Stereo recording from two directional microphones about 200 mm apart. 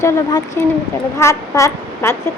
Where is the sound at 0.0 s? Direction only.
15° left (ahead or behind).